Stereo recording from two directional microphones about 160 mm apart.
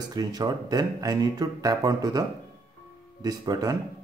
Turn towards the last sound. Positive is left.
turn(degrees=-25)  # may be behind; listen again after turning